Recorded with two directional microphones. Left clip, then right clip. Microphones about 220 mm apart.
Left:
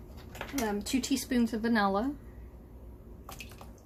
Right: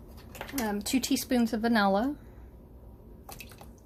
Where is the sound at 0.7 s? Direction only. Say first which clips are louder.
Right 5 dB; 45° right (ahead or behind).